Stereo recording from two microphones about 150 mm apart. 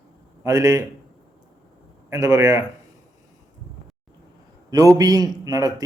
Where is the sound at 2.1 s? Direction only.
20° right (ahead or behind).